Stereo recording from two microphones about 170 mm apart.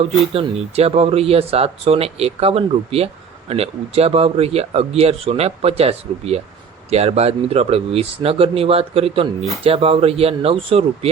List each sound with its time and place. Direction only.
0.3 s speech: 35° right (ahead or behind)